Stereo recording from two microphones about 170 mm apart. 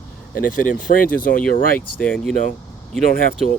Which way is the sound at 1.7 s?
5° left (ahead or behind).